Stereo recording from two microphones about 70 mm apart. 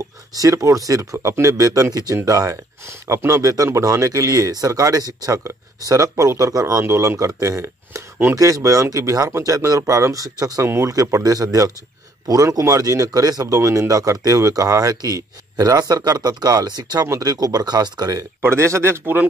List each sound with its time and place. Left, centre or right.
0.3 s speech: right
2.9 s speech: right
8.4 s speech: right
10.6 s speech: right
10.9 s speech: right
13.6 s speech: right
15.5 s speech: right
17.1 s speech: right
18.4 s speech: right